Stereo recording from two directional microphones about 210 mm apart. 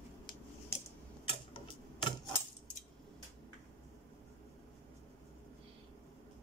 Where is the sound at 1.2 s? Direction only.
25° left (ahead or behind).